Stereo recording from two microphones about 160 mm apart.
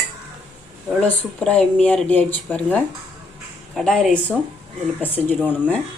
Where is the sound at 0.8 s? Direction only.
5° left (ahead or behind).